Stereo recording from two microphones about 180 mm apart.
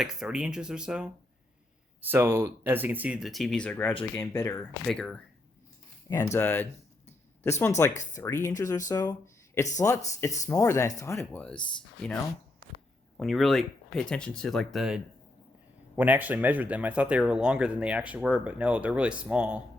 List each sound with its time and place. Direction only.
0.0 s speech: 5° right (ahead or behind)
6.1 s speech: 15° left (ahead or behind)
7.8 s speech: 15° left (ahead or behind)
13.1 s speech: centre (ahead or behind)